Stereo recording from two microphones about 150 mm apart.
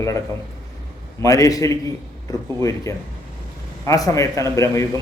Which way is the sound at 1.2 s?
20° left (ahead or behind).